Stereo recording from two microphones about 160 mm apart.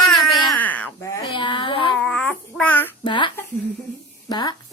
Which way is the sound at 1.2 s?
30° left (ahead or behind).